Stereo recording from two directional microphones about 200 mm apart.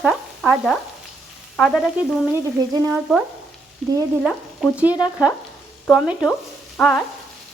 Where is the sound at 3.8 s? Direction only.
Centre (ahead or behind).